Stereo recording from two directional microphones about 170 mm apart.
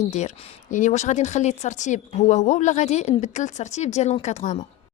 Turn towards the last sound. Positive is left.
turn(degrees=40)  # may be behind; listen again after turning